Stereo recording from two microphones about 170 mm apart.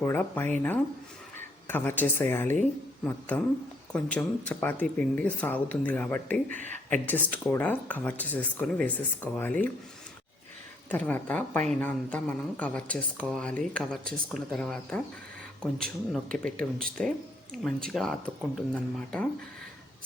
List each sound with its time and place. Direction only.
0.0 s speech: 10° left (ahead or behind)
1.6 s speech: 10° left (ahead or behind)
6.5 s speech: 45° right (ahead or behind)
7.3 s speech: 10° left (ahead or behind)
10.8 s speech: 10° left (ahead or behind)